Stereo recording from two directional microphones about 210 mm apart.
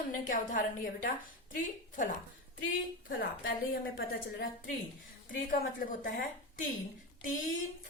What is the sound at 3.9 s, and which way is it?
A woman's voice, 40° left (ahead or behind).